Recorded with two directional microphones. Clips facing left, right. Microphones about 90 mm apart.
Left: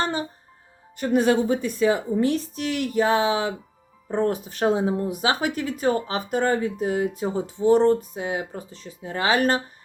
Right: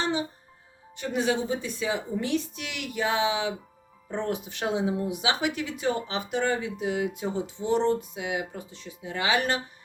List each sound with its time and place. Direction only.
0.0 s music: 45° left (ahead or behind)
0.9 s speech: 45° left (ahead or behind)